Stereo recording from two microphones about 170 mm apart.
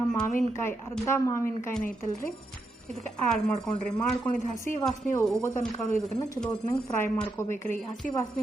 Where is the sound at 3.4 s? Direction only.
5° left (ahead or behind).